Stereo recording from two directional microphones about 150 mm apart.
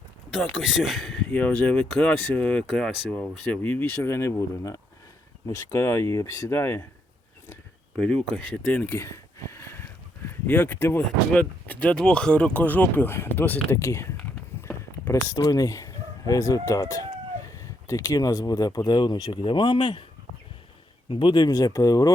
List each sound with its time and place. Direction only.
0.5 s speech: centre (ahead or behind); by 6.8 s 15° left (ahead or behind)
7.9 s speech: 5° left (ahead or behind)
14.2 s a sound: 10° left (ahead or behind)
17.8 s speech: 25° left (ahead or behind)
21.1 s speech: 35° left (ahead or behind)